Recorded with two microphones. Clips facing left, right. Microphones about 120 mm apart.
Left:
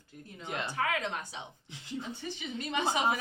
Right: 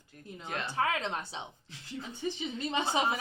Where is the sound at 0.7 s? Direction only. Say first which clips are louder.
Right 2 dB; 30° right (ahead or behind).